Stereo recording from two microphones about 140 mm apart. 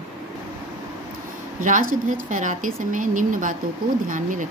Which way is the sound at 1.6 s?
70° right (ahead or behind).